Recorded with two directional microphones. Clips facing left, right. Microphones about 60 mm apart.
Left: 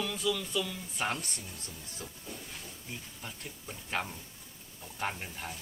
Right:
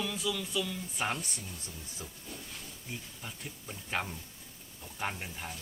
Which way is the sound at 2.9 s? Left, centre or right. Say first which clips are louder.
Right 1 dB; centre.